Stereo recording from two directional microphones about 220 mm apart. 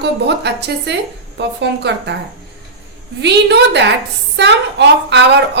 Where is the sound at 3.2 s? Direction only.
50° right (ahead or behind).